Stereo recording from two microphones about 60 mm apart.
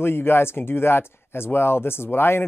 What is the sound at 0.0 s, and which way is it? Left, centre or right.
Speech, left.